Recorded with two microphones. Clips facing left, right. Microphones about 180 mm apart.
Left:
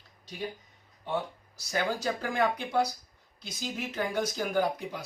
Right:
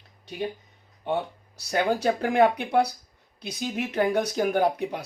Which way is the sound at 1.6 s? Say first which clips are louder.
Right 6 dB; 65° right (ahead or behind).